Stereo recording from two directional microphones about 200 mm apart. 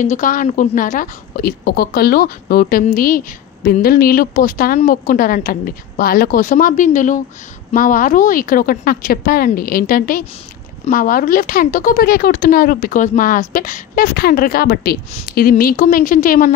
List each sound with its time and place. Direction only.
0.0 s speech: 40° left (ahead or behind)